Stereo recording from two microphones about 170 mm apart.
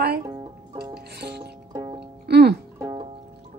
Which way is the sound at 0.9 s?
70° right (ahead or behind).